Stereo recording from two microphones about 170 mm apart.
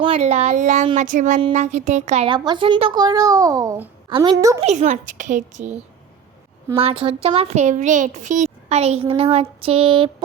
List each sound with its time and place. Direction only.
0.0 s a woman's voice: 35° right (ahead or behind)
2.3 s speech: 25° right (ahead or behind)
4.6 s a woman's voice: 45° right (ahead or behind)
6.7 s a woman's voice: 35° right (ahead or behind)